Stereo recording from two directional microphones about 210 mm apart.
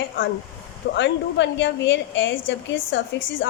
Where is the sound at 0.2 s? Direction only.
65° left (ahead or behind).